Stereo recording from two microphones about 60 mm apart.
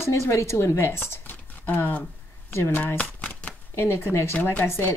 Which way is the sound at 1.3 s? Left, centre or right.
Left.